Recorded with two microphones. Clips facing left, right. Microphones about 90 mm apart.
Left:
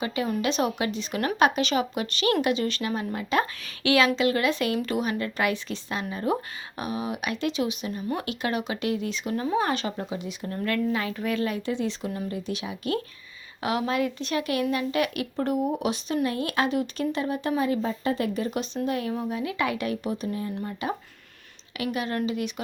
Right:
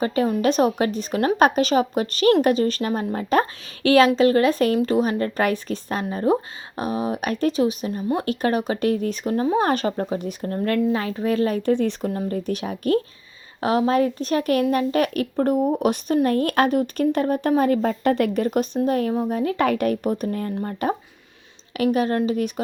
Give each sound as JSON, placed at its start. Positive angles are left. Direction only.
{"t": 0.0, "sound": "speech", "side_deg": -40}
{"t": 9.3, "sound": "speech", "side_deg": -35}